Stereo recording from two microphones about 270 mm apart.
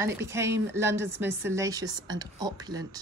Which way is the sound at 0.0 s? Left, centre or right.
Centre.